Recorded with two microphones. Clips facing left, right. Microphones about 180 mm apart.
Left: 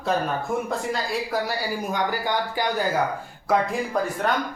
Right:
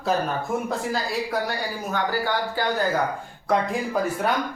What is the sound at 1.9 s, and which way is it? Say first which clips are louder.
Speech: right 2 dB; 15° left (ahead or behind).